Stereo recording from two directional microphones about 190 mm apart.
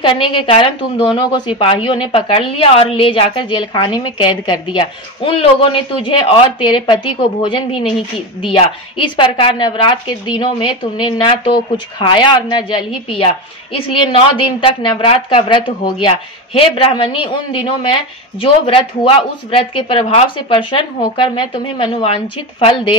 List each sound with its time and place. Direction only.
0.0 s a woman's voice: 25° left (ahead or behind)
14.3 s a woman's voice: 25° left (ahead or behind)